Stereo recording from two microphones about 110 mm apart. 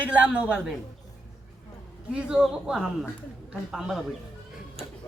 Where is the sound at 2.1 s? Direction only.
10° right (ahead or behind).